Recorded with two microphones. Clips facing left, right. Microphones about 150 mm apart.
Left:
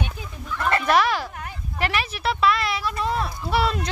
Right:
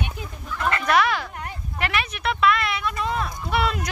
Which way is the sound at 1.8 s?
35° left (ahead or behind).